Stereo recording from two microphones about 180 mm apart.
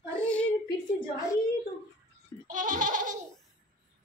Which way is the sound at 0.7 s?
20° left (ahead or behind).